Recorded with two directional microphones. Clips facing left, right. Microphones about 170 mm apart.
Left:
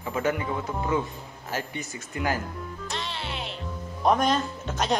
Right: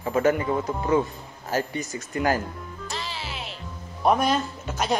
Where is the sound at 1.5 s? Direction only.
40° right (ahead or behind).